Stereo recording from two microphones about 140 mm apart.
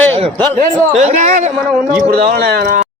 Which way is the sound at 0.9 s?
55° right (ahead or behind).